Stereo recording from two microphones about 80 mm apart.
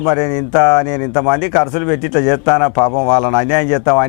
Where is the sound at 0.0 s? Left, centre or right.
Centre.